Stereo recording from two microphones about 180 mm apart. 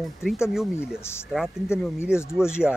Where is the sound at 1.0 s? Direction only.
15° left (ahead or behind).